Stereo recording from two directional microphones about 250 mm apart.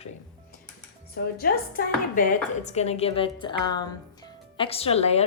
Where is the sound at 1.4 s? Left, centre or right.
Left.